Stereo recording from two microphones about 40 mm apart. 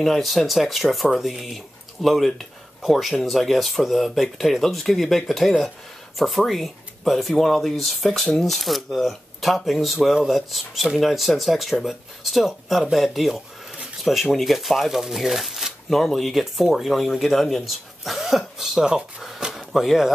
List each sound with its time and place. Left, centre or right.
0.0 s speech: centre
18.9 s speech: right
19.5 s a sound: centre